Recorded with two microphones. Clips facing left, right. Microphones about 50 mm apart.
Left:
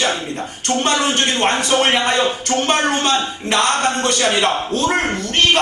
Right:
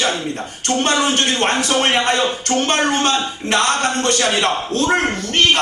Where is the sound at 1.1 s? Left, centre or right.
Left.